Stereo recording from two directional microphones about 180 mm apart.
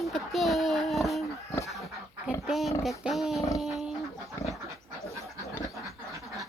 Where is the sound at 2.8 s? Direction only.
Centre (ahead or behind).